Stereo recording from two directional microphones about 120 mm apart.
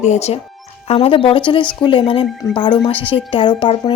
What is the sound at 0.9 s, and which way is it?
Speech, 55° left (ahead or behind).